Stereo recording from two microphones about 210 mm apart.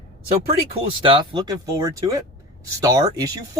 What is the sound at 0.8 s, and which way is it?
Speech, 25° right (ahead or behind).